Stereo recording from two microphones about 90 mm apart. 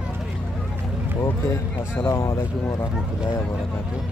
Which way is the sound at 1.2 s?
25° left (ahead or behind).